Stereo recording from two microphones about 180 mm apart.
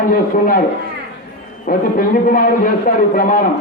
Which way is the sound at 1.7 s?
50° left (ahead or behind).